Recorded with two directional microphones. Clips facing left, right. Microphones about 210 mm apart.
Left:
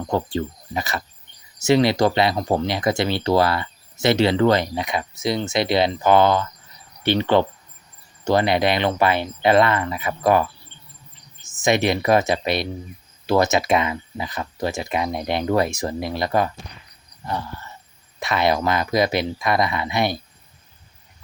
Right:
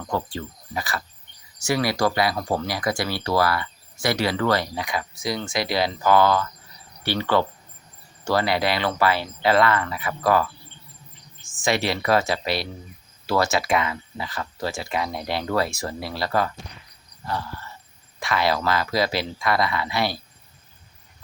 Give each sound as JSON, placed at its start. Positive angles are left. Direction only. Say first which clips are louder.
{"t": 0.1, "sound": "speech", "louder": "left 5 dB", "side_deg": 25}
{"t": 11.6, "sound": "speech", "louder": "left 4 dB", "side_deg": 20}